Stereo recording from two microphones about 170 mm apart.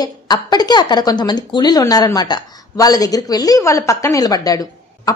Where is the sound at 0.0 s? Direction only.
25° left (ahead or behind).